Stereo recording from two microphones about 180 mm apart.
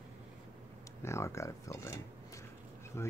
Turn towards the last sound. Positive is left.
turn(degrees=15)  # may be behind; listen again after turning